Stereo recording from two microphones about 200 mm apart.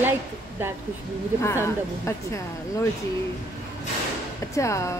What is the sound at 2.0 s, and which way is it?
Speech, 15° left (ahead or behind).